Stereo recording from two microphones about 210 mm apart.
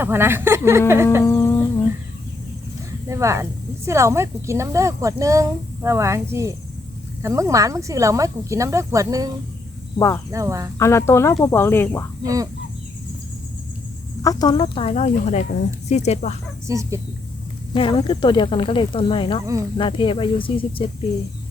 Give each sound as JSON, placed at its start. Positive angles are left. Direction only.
{"t": 0.0, "sound": "speech", "side_deg": -10}
{"t": 1.2, "sound": "humming", "side_deg": 15}
{"t": 3.1, "sound": "speech", "side_deg": -15}
{"t": 10.3, "sound": "speech", "side_deg": -15}
{"t": 10.8, "sound": "speech", "side_deg": 15}
{"t": 12.2, "sound": "speech", "side_deg": -15}
{"t": 14.2, "sound": "speech", "side_deg": 15}
{"t": 16.6, "sound": "speech", "side_deg": -15}
{"t": 17.7, "sound": "speech", "side_deg": 25}